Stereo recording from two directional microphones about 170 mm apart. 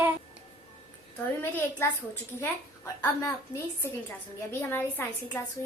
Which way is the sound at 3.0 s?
15° left (ahead or behind).